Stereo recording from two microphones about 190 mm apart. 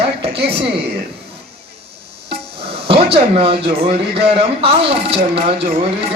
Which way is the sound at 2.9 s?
30° right (ahead or behind).